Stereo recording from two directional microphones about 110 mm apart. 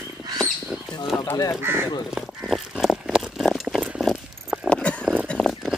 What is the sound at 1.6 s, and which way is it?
Crow, 20° right (ahead or behind).